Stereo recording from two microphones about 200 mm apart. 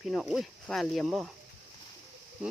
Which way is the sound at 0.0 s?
Centre (ahead or behind).